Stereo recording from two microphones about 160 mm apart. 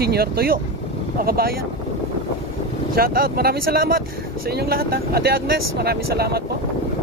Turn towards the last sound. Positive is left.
turn(degrees=-80)